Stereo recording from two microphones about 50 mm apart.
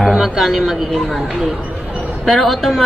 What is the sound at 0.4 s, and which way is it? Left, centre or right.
Speech, centre.